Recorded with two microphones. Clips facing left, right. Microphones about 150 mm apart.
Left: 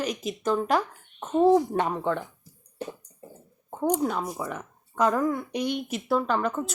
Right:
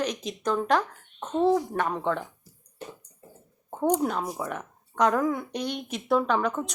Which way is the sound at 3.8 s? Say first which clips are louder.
Right 1 dB; centre (ahead or behind).